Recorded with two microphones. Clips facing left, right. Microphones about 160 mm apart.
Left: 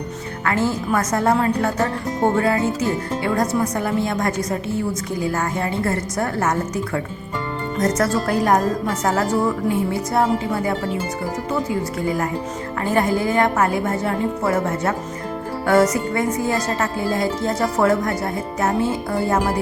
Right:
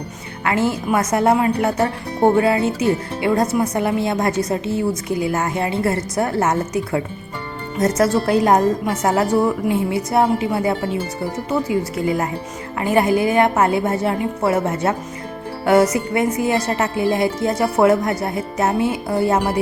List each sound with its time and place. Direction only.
0.4 s speech: 20° right (ahead or behind)